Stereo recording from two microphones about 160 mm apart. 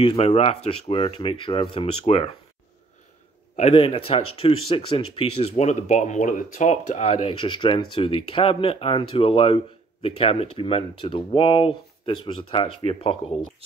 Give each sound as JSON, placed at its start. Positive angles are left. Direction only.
{"t": 0.0, "sound": "speech", "side_deg": 35}
{"t": 3.5, "sound": "speech", "side_deg": 40}